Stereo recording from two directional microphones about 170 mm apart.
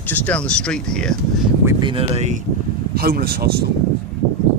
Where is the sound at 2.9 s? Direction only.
60° right (ahead or behind).